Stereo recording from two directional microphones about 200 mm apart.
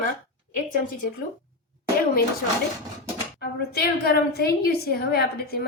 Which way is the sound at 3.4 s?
50° left (ahead or behind).